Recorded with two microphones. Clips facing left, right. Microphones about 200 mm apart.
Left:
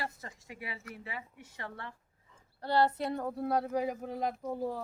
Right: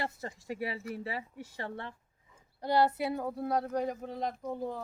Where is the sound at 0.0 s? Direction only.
30° right (ahead or behind).